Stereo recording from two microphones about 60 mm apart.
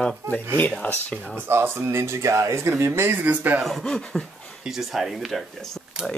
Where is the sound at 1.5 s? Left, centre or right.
Right.